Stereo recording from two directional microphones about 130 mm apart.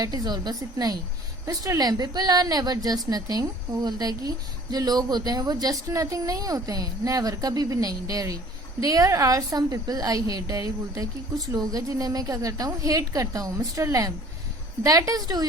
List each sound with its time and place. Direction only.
0.0 s a woman's voice: 30° right (ahead or behind)